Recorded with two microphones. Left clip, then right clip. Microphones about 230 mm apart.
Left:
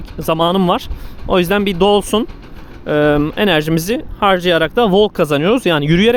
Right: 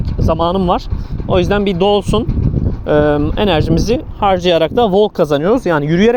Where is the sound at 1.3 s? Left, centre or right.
Centre.